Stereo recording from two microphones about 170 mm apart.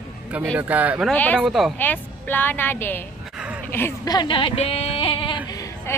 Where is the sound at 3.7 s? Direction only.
15° left (ahead or behind).